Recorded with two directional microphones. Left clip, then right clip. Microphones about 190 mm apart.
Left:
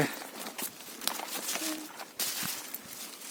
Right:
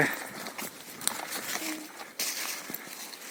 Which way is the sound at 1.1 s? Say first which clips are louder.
Right 1 dB; 50° right (ahead or behind).